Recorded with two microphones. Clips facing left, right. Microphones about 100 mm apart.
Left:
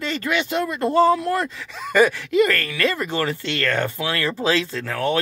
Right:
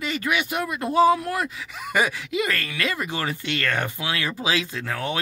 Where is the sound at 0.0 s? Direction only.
10° right (ahead or behind).